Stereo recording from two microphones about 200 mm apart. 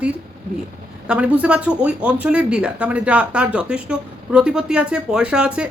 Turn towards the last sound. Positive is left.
turn(degrees=-5)  # may be behind; listen again after turning